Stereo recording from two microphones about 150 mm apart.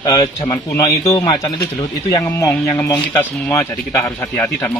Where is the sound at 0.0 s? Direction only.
20° left (ahead or behind).